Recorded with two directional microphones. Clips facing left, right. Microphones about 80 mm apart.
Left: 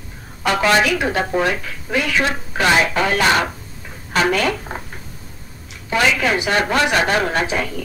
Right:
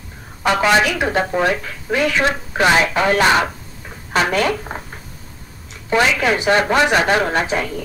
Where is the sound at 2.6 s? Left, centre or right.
Centre.